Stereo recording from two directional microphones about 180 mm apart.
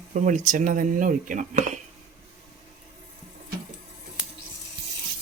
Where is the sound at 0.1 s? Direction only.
45° right (ahead or behind).